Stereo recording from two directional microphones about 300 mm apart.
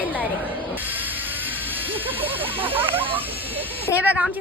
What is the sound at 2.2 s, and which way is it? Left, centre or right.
Hiss, centre.